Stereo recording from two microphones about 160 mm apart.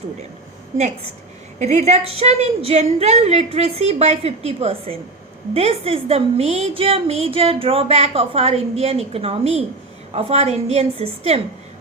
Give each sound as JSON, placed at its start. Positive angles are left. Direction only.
{"t": 1.5, "sound": "a woman's voice", "side_deg": -45}